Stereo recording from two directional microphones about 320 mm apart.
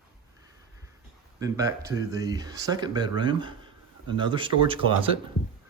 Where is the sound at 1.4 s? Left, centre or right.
Centre.